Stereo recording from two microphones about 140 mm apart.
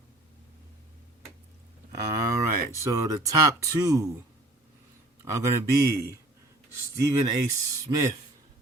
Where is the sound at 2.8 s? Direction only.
20° right (ahead or behind).